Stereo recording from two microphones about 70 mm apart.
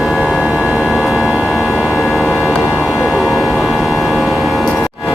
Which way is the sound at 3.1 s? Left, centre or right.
Centre.